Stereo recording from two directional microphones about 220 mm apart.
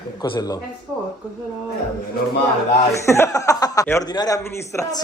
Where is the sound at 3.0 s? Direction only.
10° left (ahead or behind).